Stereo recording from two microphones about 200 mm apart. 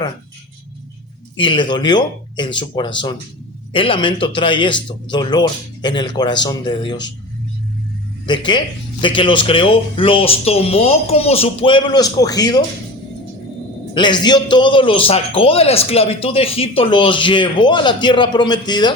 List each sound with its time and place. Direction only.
1.4 s a man's voice: 25° left (ahead or behind)
8.4 s a man's voice: 25° left (ahead or behind)
13.9 s a man's voice: 20° left (ahead or behind)